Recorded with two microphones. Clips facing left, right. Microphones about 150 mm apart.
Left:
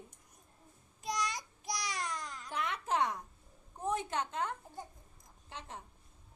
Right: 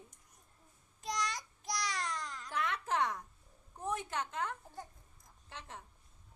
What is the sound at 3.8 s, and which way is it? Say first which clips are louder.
A woman's voice: left 3 dB; 20° left (ahead or behind).